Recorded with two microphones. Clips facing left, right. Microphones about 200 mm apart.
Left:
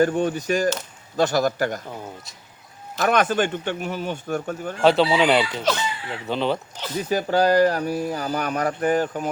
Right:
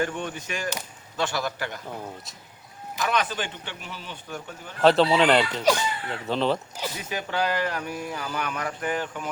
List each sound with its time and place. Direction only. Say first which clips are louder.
0.0 s speech: left 9 dB; 40° left (ahead or behind)
3.0 s speech: left 7 dB; 50° left (ahead or behind)
4.8 s speech: left 1 dB; centre (ahead or behind)
5.7 s speech: right 4 dB; 10° right (ahead or behind)
6.1 s speech: left 1 dB; centre (ahead or behind)
6.9 s speech: left 11 dB; 35° left (ahead or behind)